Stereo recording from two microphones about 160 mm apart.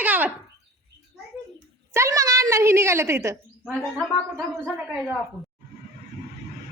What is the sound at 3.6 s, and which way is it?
A woman's voice, 5° left (ahead or behind).